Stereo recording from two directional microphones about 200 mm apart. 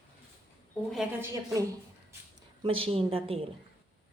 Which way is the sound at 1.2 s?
15° right (ahead or behind).